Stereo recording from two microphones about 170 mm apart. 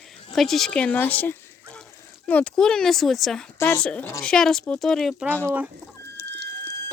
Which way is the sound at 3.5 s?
15° left (ahead or behind).